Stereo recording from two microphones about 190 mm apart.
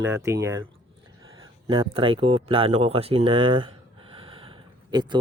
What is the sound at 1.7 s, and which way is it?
Speech, 25° right (ahead or behind).